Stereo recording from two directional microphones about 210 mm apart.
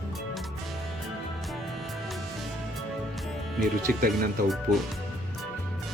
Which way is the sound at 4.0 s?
45° right (ahead or behind).